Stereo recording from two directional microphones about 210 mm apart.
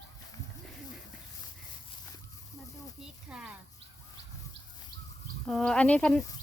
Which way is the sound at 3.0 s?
5° right (ahead or behind).